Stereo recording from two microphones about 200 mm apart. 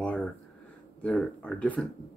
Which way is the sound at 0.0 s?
5° left (ahead or behind).